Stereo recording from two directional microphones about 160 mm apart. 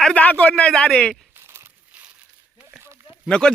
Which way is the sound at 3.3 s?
5° left (ahead or behind).